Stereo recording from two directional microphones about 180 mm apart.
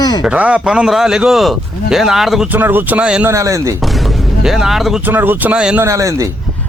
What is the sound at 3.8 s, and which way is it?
Speech, centre (ahead or behind).